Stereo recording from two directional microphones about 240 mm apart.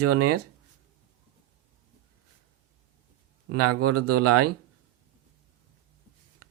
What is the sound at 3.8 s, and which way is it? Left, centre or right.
Speech, right.